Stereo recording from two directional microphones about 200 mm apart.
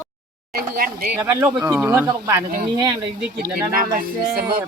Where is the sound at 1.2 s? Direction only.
10° right (ahead or behind).